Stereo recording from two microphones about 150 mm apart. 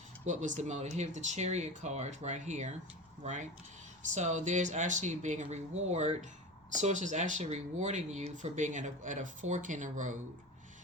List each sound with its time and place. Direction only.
0.3 s speech: 55° right (ahead or behind)